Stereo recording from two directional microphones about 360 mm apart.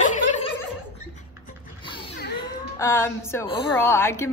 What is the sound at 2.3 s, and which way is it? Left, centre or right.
A woman's voice, centre.